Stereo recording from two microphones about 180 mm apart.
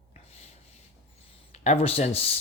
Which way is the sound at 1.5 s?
35° left (ahead or behind).